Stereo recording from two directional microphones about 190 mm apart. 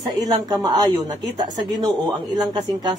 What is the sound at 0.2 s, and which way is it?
A woman's voice, 20° right (ahead or behind).